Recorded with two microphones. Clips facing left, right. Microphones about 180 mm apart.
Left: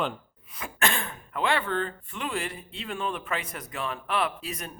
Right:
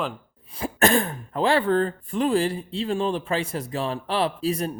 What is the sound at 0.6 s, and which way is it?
Speech, 40° right (ahead or behind).